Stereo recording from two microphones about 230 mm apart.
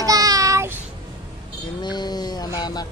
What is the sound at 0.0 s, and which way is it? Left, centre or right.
Child singing, centre.